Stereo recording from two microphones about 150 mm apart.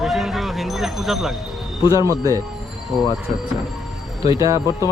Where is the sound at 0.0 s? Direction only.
Centre (ahead or behind).